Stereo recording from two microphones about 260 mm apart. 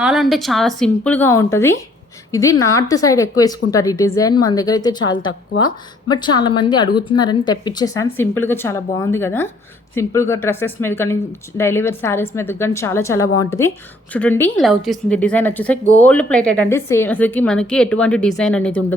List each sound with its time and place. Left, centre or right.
0.0 s a woman's voice: centre